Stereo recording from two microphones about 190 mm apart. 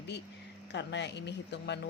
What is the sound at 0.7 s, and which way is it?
Speech, 65° left (ahead or behind).